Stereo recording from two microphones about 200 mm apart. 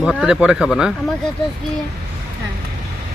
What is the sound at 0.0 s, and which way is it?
Speech, centre (ahead or behind).